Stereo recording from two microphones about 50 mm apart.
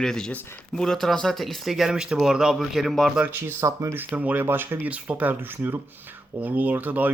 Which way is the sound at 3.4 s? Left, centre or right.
Right.